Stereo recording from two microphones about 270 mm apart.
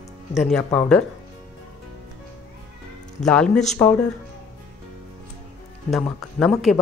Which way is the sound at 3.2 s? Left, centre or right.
Centre.